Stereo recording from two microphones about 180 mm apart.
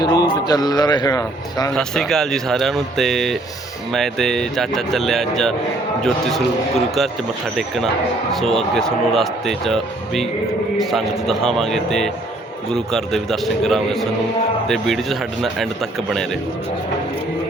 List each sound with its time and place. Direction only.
0.0 s a man's voice: 20° left (ahead or behind)
1.7 s speech: 5° left (ahead or behind)
8.4 s speech: centre (ahead or behind)